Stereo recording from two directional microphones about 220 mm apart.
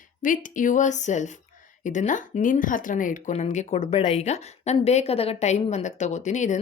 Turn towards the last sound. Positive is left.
turn(degrees=35)  # may be behind; listen again after turning